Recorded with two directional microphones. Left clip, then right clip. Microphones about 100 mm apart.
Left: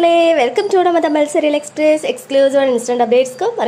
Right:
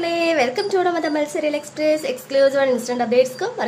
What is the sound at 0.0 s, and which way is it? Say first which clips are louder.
A woman's voice: left 8 dB; 40° left (ahead or behind).